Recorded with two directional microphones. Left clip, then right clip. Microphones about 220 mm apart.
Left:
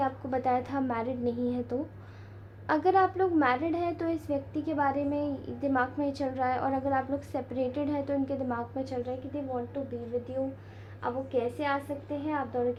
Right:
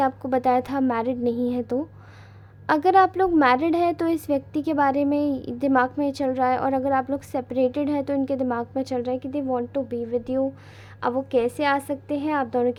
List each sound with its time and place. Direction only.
0.0 s a woman's voice: 40° right (ahead or behind)